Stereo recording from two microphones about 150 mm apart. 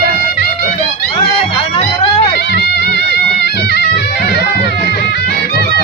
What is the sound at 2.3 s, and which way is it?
Music, 90° left.